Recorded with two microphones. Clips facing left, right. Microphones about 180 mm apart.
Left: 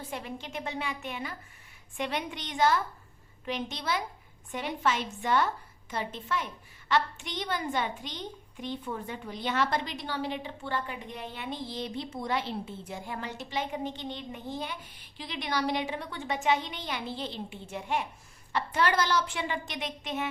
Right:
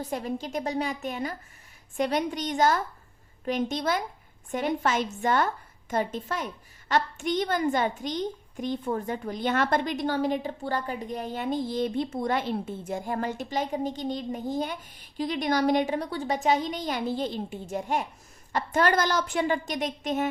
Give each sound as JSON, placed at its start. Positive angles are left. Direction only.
{"t": 0.1, "sound": "a woman's voice", "side_deg": -40}